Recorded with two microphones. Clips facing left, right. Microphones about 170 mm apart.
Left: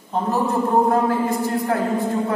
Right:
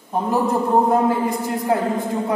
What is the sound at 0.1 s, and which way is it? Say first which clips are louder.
Speech: right 1 dB; 10° right (ahead or behind).